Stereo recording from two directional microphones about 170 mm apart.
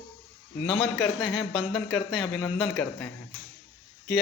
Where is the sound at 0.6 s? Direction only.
5° left (ahead or behind).